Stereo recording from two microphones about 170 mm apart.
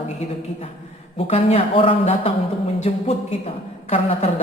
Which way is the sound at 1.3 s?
35° left (ahead or behind).